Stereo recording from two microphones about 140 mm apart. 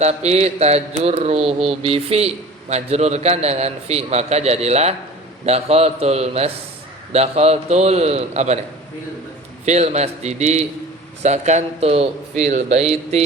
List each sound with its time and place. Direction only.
0.0 s a man's voice: 50° right (ahead or behind)
1.4 s speech: centre (ahead or behind)
1.8 s a man's voice: 45° right (ahead or behind)
9.6 s a man's voice: 55° right (ahead or behind)